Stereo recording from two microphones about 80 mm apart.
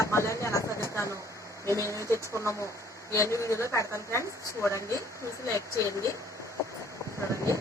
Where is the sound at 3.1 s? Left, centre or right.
Left.